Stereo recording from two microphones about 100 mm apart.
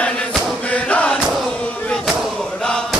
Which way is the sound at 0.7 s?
10° left (ahead or behind).